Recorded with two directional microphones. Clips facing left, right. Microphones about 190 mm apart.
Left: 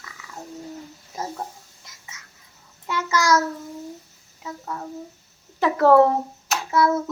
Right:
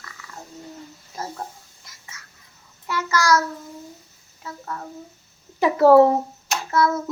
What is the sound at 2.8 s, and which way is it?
Child singing, 20° left (ahead or behind).